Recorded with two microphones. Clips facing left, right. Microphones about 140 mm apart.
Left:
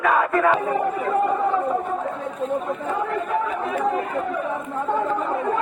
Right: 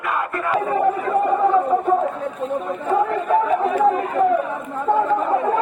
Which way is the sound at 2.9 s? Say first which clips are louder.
Right 8 dB; 60° right (ahead or behind).